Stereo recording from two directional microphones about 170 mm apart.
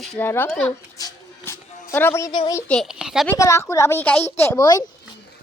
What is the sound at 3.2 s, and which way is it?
A woman's voice, 20° left (ahead or behind).